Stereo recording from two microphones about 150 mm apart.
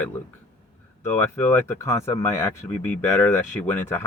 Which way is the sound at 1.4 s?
15° left (ahead or behind).